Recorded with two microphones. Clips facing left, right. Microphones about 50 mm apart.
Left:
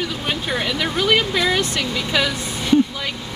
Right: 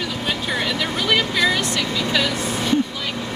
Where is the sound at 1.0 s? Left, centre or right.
Centre.